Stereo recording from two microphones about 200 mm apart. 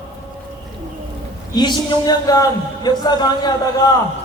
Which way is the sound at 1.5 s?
20° left (ahead or behind).